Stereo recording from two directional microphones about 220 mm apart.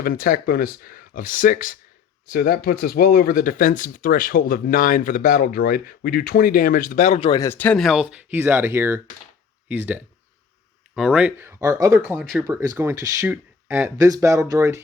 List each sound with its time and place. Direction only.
0.0 s speech: 40° left (ahead or behind); by 14.8 s 15° right (ahead or behind)